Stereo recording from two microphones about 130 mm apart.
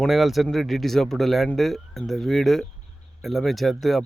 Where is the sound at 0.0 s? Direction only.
Centre (ahead or behind).